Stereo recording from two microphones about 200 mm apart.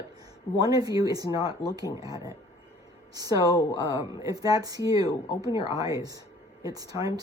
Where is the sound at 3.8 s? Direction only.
15° right (ahead or behind).